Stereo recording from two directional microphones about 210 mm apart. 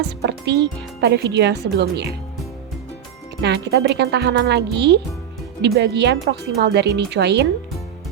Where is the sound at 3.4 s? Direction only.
50° right (ahead or behind).